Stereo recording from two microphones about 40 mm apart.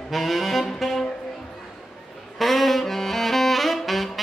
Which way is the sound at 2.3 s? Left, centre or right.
Centre.